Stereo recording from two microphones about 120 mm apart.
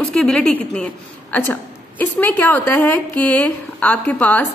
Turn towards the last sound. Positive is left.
turn(degrees=15)  # may be behind; listen again after turning